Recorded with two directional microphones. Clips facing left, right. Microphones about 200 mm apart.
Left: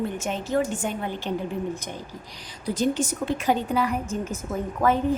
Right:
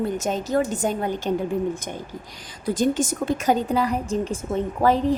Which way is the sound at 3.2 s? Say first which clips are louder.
Right 3 dB; 45° right (ahead or behind).